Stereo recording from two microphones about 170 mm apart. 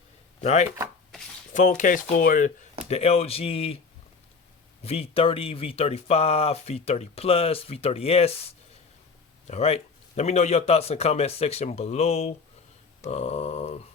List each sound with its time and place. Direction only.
0.4 s speech: 40° left (ahead or behind)
2.9 s speech: 35° left (ahead or behind)
4.8 s speech: 35° left (ahead or behind)
9.5 s speech: 40° left (ahead or behind)